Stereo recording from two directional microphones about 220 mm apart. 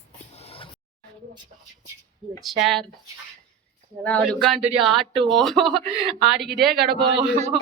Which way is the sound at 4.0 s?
5° left (ahead or behind).